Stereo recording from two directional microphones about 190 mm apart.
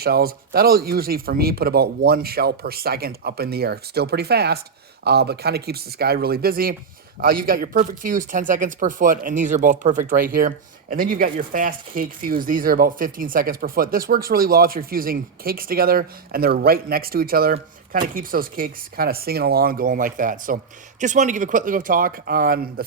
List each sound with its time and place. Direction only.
0.0 s speech: 55° right (ahead or behind)